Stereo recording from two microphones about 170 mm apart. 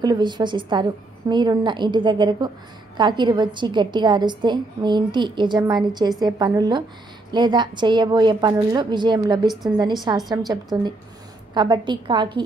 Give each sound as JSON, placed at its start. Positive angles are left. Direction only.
{"t": 0.0, "sound": "a woman's voice", "side_deg": -25}